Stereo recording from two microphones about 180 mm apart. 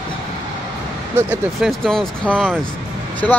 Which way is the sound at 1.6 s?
5° left (ahead or behind).